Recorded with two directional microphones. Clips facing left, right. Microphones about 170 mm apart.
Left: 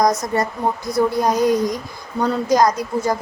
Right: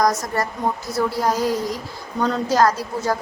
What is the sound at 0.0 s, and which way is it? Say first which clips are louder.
A woman's voice: left 2 dB; 20° left (ahead or behind).